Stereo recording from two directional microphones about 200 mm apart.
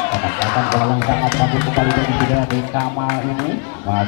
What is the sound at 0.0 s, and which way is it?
Speech, 10° left (ahead or behind).